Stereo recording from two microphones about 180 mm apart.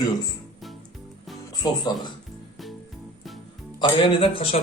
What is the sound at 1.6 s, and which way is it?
Speech, 20° left (ahead or behind).